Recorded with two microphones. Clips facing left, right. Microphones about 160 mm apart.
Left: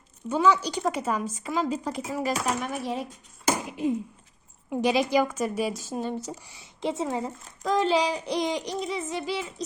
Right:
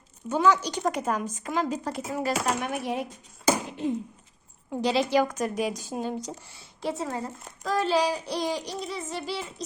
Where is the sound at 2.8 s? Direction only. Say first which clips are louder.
Right 1 dB; 60° right (ahead or behind).